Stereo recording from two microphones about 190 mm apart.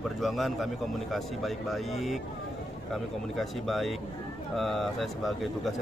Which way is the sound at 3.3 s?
Centre (ahead or behind).